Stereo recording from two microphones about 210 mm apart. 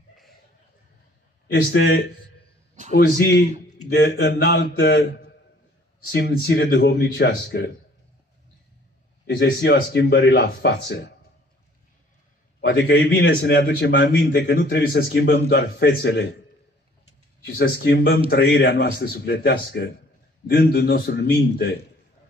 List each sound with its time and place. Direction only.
1.5 s a man's voice: 55° left (ahead or behind)
6.0 s a man's voice: 45° left (ahead or behind)
9.2 s a man's voice: 50° left (ahead or behind)
12.5 s a man's voice: 50° left (ahead or behind)
17.5 s a man's voice: 45° left (ahead or behind)